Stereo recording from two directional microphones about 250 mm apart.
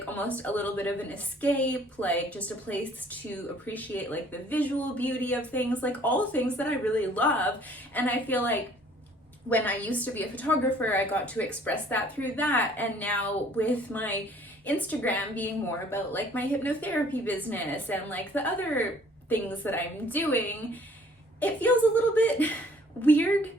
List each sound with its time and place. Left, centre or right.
0.0 s a woman's voice: centre